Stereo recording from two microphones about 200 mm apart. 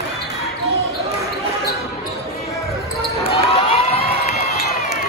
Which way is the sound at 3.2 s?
30° left (ahead or behind).